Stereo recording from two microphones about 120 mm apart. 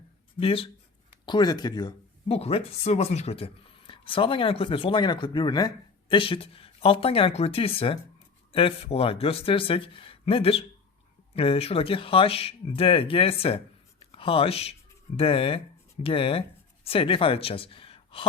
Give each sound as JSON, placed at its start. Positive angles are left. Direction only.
{"t": 0.3, "sound": "speech", "side_deg": 50}
{"t": 1.2, "sound": "speech", "side_deg": 40}
{"t": 2.2, "sound": "speech", "side_deg": 55}